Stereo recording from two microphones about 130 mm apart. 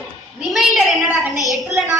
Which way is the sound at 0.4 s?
Centre (ahead or behind).